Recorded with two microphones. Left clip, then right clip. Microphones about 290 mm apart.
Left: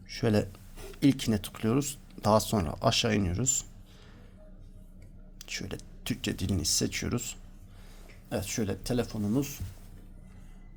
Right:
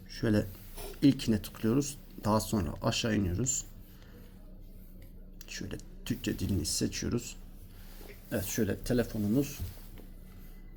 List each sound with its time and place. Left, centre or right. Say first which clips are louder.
0.2 s speech: left 3 dB; left
5.4 s speech: left 4 dB; left